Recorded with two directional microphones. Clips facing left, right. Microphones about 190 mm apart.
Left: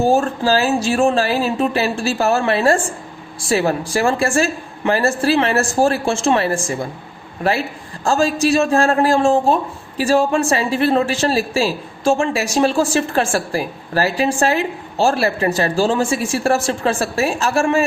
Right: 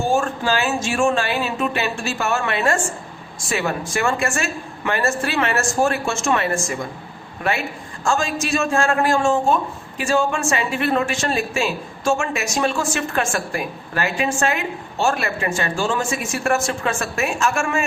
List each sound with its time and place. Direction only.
0.0 s speech: 35° left (ahead or behind)